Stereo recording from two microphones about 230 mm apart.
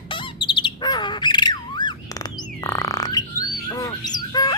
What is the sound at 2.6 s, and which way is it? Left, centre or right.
Bird, centre.